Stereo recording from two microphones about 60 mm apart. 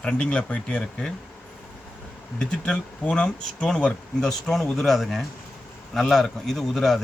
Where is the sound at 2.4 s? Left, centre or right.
Centre.